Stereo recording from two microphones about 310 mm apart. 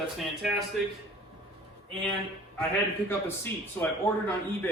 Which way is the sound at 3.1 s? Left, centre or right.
Centre.